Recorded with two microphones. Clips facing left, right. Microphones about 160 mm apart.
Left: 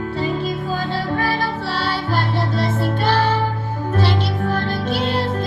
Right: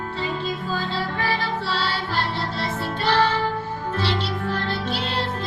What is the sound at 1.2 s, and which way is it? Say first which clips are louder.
Music: left 4 dB; 45° left (ahead or behind).